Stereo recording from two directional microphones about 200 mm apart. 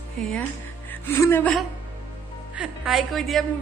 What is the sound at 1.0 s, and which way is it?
A woman's voice, 10° left (ahead or behind).